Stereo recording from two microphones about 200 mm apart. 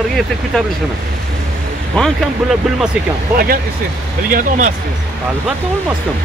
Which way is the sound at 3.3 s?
50° right (ahead or behind).